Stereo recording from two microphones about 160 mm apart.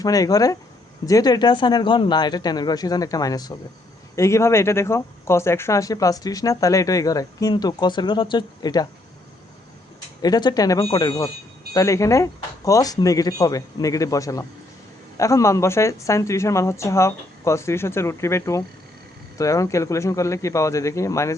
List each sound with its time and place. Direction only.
0.0 s speech: 20° left (ahead or behind)
10.2 s a woman's voice: 25° left (ahead or behind)